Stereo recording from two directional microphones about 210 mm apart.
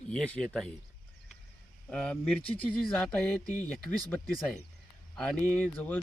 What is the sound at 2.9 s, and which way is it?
Mantra, 5° left (ahead or behind).